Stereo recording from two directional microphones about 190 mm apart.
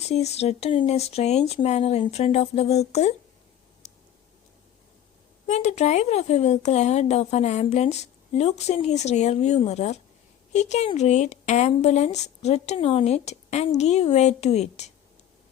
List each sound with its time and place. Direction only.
0.1 s speech: 35° left (ahead or behind)
3.8 s a sound: 35° left (ahead or behind)
5.5 s speech: 35° left (ahead or behind)